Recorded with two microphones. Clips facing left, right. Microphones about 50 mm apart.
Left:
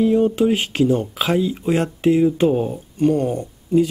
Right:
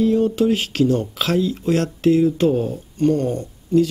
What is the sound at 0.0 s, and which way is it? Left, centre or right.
Speech, centre.